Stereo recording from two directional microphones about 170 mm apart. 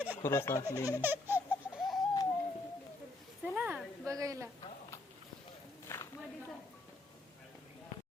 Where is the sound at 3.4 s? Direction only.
10° right (ahead or behind).